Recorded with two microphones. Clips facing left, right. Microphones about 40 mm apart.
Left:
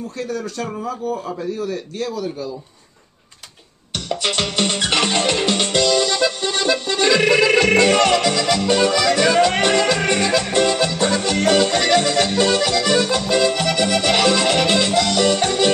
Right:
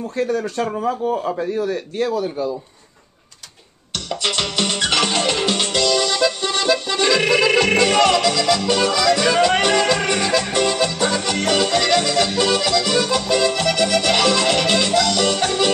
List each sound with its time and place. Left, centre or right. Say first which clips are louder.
0.2 s a man's voice: right 5 dB; right
3.9 s music: left 1 dB; centre